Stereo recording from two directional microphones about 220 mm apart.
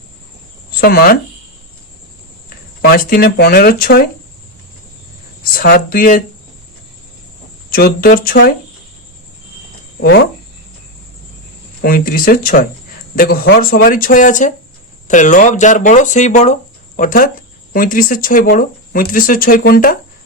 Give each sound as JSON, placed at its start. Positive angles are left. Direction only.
{"t": 0.8, "sound": "speech", "side_deg": 45}
{"t": 2.8, "sound": "speech", "side_deg": 45}
{"t": 5.5, "sound": "speech", "side_deg": 45}
{"t": 7.7, "sound": "speech", "side_deg": 45}
{"t": 10.0, "sound": "speech", "side_deg": 45}
{"t": 11.8, "sound": "speech", "side_deg": 40}